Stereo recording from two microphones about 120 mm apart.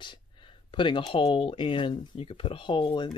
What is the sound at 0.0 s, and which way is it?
Speech, 40° left (ahead or behind).